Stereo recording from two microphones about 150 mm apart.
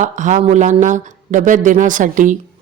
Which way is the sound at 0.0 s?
55° right (ahead or behind).